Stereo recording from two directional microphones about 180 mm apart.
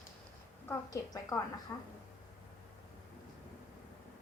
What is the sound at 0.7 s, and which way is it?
A woman's voice, 20° left (ahead or behind).